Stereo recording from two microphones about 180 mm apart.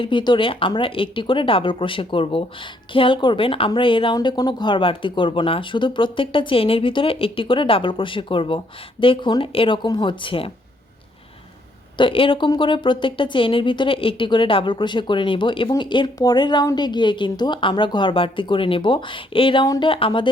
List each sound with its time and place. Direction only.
0.0 s speech: 25° left (ahead or behind)
11.9 s speech: 30° left (ahead or behind)